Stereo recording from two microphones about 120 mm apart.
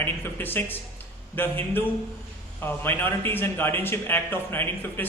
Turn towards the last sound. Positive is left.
turn(degrees=15)  # may be behind; listen again after turning